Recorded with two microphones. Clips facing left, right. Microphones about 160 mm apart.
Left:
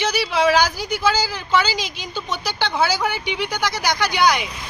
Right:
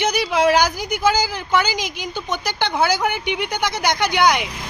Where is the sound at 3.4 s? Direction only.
20° right (ahead or behind).